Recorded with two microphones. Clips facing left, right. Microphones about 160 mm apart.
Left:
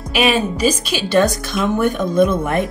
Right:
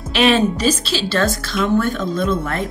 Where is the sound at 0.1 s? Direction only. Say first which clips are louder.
Right 2 dB; 10° left (ahead or behind).